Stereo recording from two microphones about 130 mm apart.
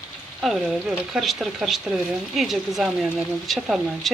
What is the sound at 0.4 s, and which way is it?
Speech, centre (ahead or behind).